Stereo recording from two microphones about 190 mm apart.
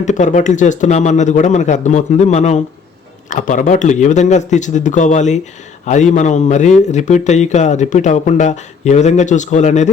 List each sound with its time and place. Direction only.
0.0 s speech: 40° left (ahead or behind)